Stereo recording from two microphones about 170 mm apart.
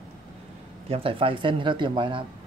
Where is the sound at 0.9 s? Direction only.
35° right (ahead or behind).